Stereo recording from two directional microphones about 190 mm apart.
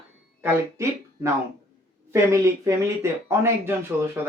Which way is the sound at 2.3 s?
15° right (ahead or behind).